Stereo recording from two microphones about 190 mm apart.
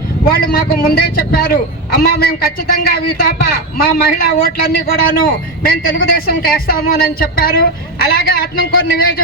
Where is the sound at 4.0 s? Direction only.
50° left (ahead or behind).